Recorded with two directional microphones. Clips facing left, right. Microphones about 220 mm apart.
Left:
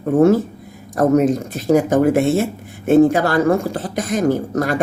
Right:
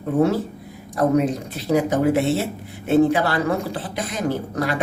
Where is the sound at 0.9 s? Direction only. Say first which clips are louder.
Left 5 dB; 45° left (ahead or behind).